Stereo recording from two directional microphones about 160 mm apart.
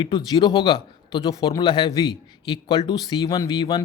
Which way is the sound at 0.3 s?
30° left (ahead or behind).